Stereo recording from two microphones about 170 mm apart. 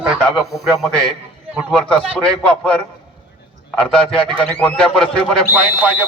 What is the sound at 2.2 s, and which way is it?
Speech, 5° left (ahead or behind).